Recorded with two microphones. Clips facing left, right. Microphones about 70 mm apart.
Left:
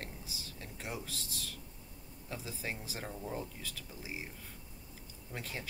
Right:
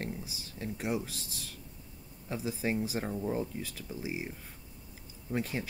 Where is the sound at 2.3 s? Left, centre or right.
Right.